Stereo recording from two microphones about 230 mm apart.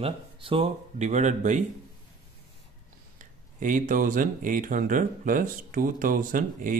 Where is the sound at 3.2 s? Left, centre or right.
Right.